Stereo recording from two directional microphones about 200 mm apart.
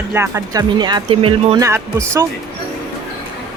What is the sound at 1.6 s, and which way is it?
Speech, 15° right (ahead or behind).